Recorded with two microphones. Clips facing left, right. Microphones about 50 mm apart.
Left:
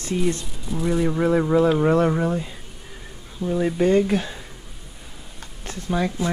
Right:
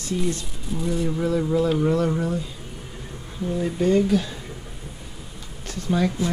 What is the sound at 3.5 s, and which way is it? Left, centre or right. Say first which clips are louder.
Speech: left 2 dB; left.